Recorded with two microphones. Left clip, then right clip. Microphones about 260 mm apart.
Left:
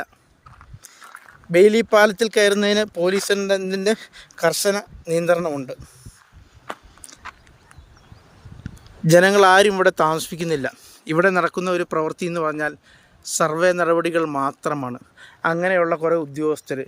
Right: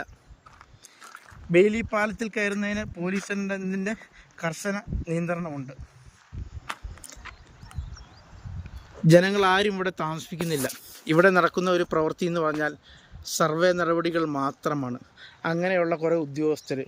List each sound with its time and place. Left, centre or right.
1.5 s speech: centre
7.2 s a sound: centre
9.0 s a man's voice: centre